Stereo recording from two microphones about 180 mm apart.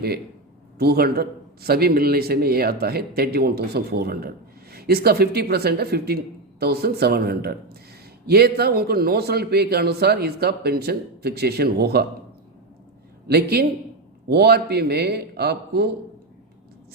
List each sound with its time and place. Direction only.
0.8 s a man's voice: 65° right (ahead or behind)
13.2 s a man's voice: 60° right (ahead or behind)